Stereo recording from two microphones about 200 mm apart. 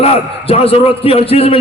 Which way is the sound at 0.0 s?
30° left (ahead or behind).